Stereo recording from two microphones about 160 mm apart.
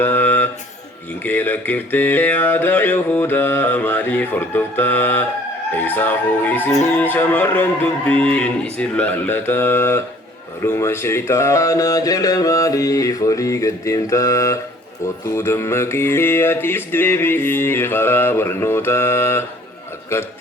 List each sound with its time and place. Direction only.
0.0 s a sound: 10° left (ahead or behind)
1.2 s music: 10° left (ahead or behind)
10.6 s speech: 15° left (ahead or behind)
15.4 s music: 15° left (ahead or behind)